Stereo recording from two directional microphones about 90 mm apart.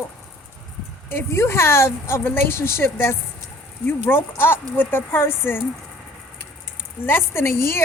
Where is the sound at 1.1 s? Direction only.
25° left (ahead or behind).